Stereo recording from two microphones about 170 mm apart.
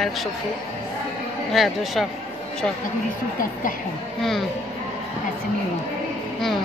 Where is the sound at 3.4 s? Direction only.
55° left (ahead or behind).